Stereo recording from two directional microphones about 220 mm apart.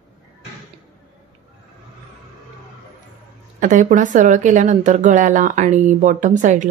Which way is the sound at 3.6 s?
35° right (ahead or behind).